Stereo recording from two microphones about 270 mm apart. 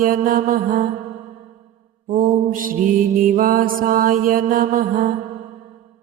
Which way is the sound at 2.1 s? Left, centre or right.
Right.